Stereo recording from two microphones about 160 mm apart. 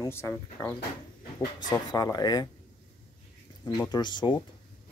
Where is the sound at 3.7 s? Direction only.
25° left (ahead or behind).